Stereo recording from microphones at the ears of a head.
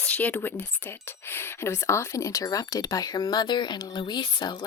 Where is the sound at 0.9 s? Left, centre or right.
Left.